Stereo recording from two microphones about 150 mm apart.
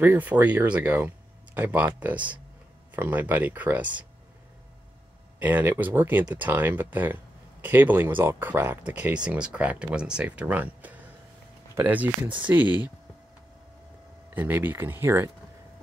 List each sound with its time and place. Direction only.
0.0 s speech: 15° right (ahead or behind)
5.4 s speech: 10° right (ahead or behind)
14.3 s speech: 15° right (ahead or behind)